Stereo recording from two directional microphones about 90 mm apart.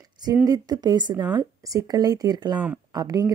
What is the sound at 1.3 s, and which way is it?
Speech, 40° right (ahead or behind).